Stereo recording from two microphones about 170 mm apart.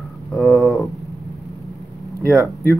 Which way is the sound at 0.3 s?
Centre (ahead or behind).